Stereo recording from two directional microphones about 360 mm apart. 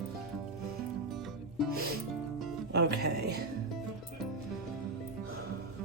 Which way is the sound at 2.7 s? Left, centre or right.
Right.